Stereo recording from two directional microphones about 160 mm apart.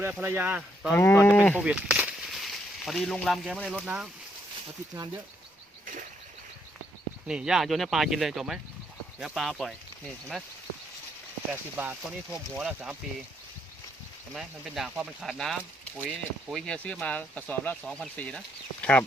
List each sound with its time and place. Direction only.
0.0 s speech: 15° right (ahead or behind)
0.9 s speech: 15° left (ahead or behind)
1.6 s speech: 5° right (ahead or behind)
5.8 s a sound: 55° right (ahead or behind)
7.3 s speech: 5° right (ahead or behind)
11.5 s speech: 10° right (ahead or behind)
14.3 s speech: centre (ahead or behind)